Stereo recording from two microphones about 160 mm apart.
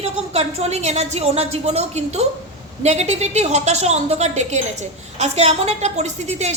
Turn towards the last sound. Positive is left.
turn(degrees=-45)  # may be behind; listen again after turning